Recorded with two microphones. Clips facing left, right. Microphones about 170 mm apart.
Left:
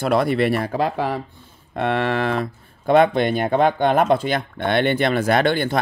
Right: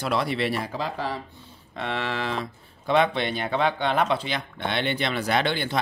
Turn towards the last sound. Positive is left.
turn(degrees=50)  # may be behind; listen again after turning